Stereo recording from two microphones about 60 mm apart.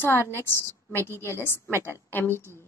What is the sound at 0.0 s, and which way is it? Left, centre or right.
A woman's voice, left.